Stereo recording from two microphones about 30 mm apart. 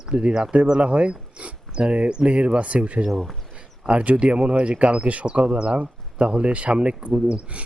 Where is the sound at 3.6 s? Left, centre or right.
Right.